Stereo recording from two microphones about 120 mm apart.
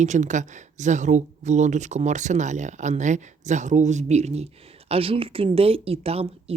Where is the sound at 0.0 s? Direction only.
85° right; by 4.4 s 65° right (ahead or behind).